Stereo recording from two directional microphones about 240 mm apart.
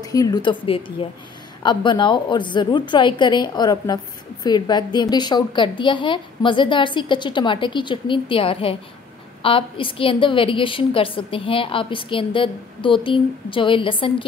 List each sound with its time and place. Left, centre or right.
0.0 s a woman's voice: centre